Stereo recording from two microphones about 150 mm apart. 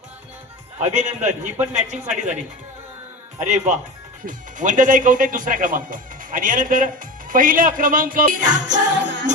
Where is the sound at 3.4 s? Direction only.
50° right (ahead or behind).